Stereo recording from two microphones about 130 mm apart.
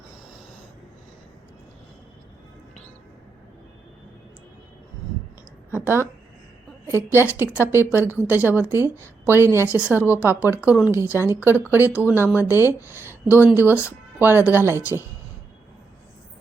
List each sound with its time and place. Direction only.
5.8 s speech: 20° right (ahead or behind)